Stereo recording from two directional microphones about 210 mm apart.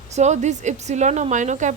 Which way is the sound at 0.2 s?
35° right (ahead or behind).